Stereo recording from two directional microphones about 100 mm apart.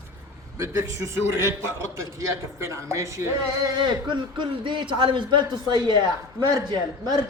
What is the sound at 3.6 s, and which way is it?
A man's voice, 50° right (ahead or behind).